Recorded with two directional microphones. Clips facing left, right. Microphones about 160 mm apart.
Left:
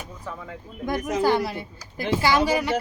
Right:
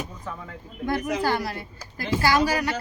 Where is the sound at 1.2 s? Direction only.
20° left (ahead or behind).